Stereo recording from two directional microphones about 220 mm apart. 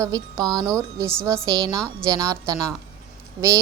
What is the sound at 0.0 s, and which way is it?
Speech, 15° right (ahead or behind).